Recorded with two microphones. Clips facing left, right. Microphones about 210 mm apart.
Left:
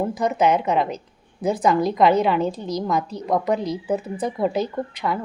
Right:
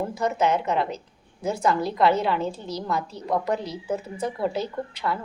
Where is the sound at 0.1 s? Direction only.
15° left (ahead or behind).